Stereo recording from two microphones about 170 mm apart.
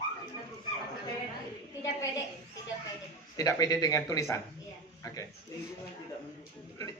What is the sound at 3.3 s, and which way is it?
Speech, 20° left (ahead or behind).